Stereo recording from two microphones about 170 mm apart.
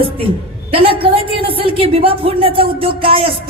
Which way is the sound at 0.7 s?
35° right (ahead or behind).